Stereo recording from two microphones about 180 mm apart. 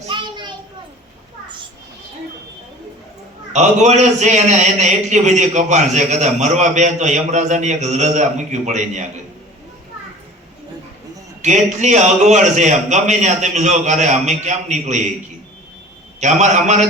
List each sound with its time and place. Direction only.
0.1 s children playing: 25° right (ahead or behind)
3.5 s a man's voice: 40° right (ahead or behind)
11.4 s a man's voice: 40° right (ahead or behind)
16.2 s a man's voice: 40° right (ahead or behind)